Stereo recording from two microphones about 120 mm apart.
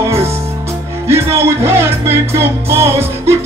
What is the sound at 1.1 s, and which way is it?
Music, 20° right (ahead or behind).